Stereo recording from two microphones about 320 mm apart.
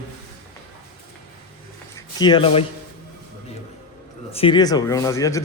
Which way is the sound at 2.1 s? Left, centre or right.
Centre.